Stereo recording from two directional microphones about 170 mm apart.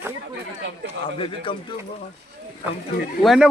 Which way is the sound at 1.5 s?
30° left (ahead or behind).